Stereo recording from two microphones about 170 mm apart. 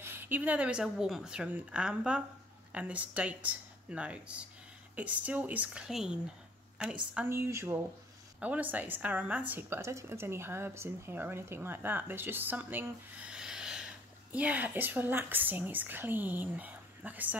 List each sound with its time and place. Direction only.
0.0 s a woman's voice: 10° right (ahead or behind)